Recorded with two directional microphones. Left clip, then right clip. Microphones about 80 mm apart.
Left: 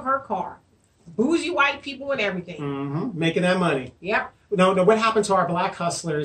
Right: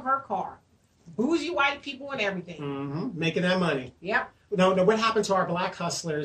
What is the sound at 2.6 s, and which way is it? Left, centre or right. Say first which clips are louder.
Speech: left 4 dB; left.